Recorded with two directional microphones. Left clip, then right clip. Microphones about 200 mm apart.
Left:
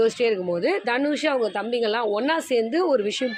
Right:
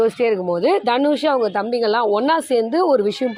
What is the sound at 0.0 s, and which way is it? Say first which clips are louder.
A woman's voice: right 4 dB; 20° right (ahead or behind).